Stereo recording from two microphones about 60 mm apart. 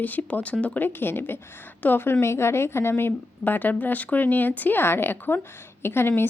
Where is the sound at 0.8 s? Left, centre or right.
Left.